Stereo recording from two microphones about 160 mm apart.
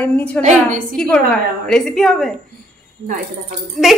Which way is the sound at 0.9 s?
5° left (ahead or behind).